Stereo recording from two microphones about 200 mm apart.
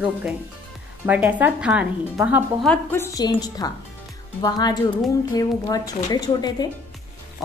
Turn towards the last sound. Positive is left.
turn(degrees=20)  # may be behind; listen again after turning